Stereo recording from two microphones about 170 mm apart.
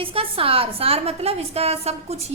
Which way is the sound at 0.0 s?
35° right (ahead or behind).